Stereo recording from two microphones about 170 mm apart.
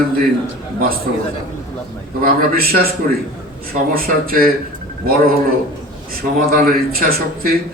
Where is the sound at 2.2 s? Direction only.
60° right (ahead or behind).